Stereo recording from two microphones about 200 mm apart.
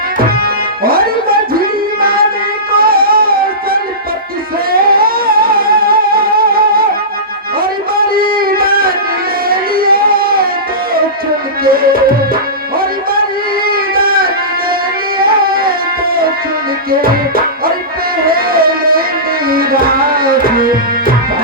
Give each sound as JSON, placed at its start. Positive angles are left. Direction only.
{"t": 0.3, "sound": "music", "side_deg": -50}
{"t": 11.6, "sound": "music", "side_deg": -45}
{"t": 13.7, "sound": "a sound", "side_deg": -45}
{"t": 15.2, "sound": "music", "side_deg": -50}
{"t": 16.9, "sound": "music", "side_deg": -45}
{"t": 18.3, "sound": "music", "side_deg": -45}